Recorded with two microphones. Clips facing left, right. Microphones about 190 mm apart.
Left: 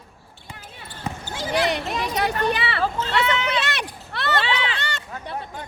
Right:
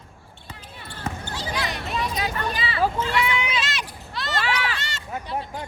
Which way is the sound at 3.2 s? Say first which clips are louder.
Left 3 dB; 10° right (ahead or behind).